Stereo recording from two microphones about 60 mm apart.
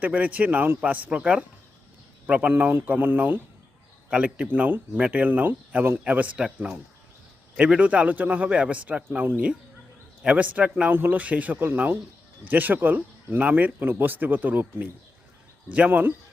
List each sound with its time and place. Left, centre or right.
0.0 s speech: right
2.7 s speech: right
4.1 s speech: right
6.3 s speech: centre
10.2 s speech: right